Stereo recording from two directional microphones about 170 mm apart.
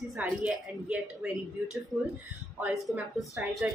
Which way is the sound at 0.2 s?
10° right (ahead or behind).